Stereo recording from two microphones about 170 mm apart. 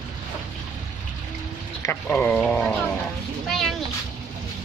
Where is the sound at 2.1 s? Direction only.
10° left (ahead or behind).